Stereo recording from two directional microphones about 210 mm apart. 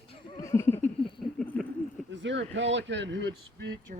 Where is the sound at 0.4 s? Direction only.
15° left (ahead or behind).